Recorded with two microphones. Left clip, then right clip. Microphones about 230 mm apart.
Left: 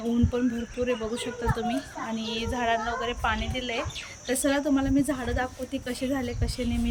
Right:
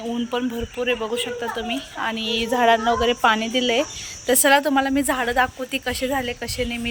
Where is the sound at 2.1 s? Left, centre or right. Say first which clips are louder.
Right 7 dB; centre.